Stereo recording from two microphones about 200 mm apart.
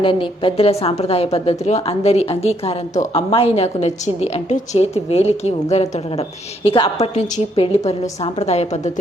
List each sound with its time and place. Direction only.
0.0 s a woman's voice: 25° left (ahead or behind)